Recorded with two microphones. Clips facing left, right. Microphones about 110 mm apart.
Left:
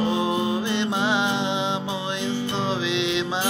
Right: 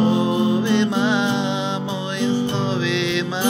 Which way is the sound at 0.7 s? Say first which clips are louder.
Right 5 dB; 20° left (ahead or behind).